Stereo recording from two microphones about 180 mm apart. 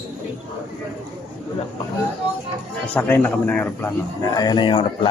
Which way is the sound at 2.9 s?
10° left (ahead or behind).